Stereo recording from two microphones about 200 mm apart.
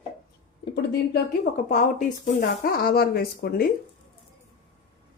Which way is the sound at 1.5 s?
40° left (ahead or behind).